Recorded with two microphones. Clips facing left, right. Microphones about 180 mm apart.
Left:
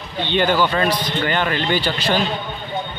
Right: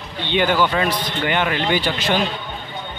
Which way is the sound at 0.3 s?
10° right (ahead or behind).